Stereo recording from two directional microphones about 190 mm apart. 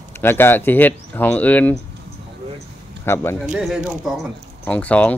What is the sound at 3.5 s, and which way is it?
Speech, 5° right (ahead or behind).